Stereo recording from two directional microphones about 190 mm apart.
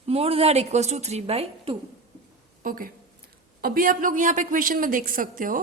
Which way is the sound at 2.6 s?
45° right (ahead or behind).